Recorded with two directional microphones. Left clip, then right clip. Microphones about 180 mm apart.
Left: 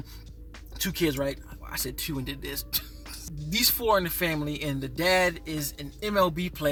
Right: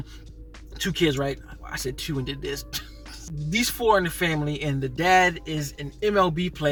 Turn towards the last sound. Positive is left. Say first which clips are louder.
# right 3 dB
turn(degrees=20)  # may be behind; listen again after turning